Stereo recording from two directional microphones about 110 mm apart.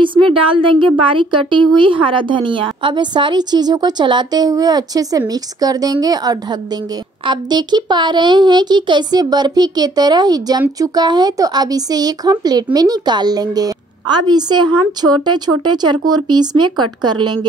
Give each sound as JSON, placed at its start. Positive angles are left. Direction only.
{"t": 0.0, "sound": "a woman's voice", "side_deg": -50}